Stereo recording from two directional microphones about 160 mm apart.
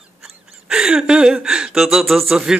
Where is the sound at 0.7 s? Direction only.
5° right (ahead or behind).